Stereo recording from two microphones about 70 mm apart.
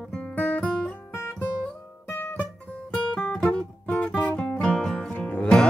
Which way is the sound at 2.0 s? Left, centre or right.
Left.